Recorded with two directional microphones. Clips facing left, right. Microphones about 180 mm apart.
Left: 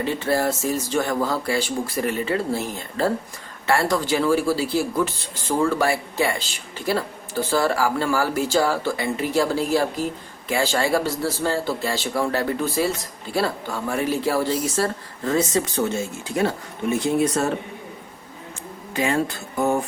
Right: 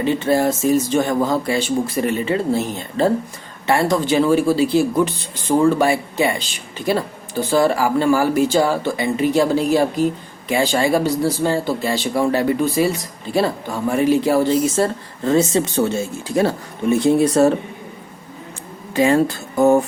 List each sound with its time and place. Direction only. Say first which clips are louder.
0.0 s speech: right 5 dB; 20° right (ahead or behind)
17.2 s speech: right 7 dB; 35° right (ahead or behind)
18.9 s speech: right 7 dB; 35° right (ahead or behind)